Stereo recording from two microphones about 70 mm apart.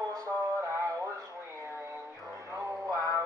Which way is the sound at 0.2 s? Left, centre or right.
Right.